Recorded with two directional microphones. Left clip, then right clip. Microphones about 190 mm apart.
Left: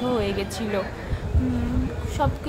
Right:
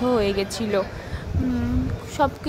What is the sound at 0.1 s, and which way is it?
Speech, 35° right (ahead or behind).